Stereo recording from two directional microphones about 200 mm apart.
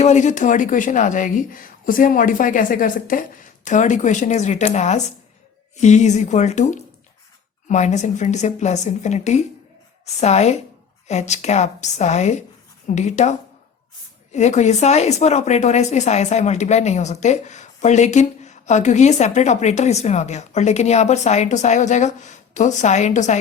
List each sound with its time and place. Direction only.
0.0 s speech: 35° left (ahead or behind)
14.3 s speech: 35° left (ahead or behind)